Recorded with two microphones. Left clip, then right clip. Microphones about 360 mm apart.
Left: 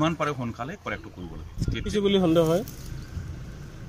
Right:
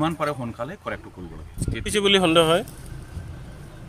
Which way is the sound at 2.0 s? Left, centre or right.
Right.